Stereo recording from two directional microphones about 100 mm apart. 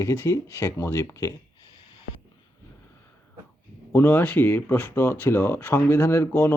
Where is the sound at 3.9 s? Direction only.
20° left (ahead or behind).